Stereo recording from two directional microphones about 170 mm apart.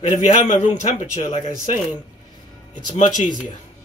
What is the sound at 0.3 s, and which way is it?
A man's voice, 40° left (ahead or behind).